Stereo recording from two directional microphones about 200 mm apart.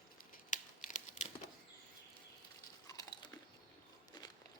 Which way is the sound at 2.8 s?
20° left (ahead or behind).